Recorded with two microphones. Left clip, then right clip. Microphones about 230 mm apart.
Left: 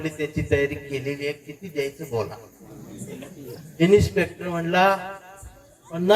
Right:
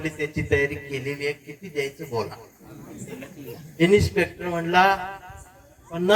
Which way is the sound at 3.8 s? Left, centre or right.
Right.